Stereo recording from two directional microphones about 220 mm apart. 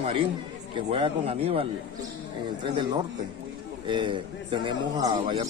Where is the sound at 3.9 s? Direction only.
20° right (ahead or behind).